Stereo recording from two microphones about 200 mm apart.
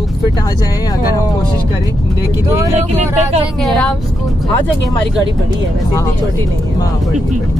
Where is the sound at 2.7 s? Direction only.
35° right (ahead or behind).